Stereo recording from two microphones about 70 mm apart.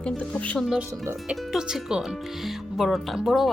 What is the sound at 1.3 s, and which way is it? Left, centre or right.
Speech, centre.